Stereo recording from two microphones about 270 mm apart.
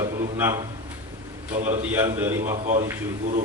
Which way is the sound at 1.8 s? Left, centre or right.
Centre.